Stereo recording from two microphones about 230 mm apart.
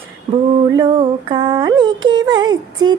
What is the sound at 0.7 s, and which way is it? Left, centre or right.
Music, right.